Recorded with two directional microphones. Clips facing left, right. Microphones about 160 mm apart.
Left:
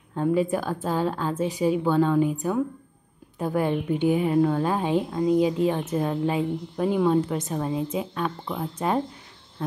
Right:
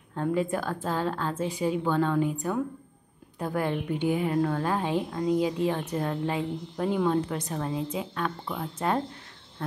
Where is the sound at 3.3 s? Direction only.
20° left (ahead or behind).